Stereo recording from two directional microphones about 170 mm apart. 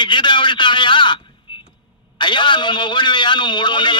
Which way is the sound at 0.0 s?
30° left (ahead or behind).